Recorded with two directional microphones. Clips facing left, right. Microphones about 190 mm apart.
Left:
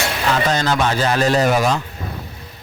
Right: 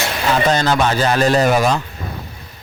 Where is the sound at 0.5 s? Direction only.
40° right (ahead or behind).